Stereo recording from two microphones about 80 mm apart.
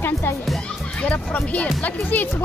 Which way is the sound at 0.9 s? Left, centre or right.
Centre.